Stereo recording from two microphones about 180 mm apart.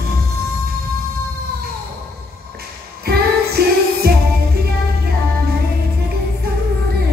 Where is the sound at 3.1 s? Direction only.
60° right (ahead or behind).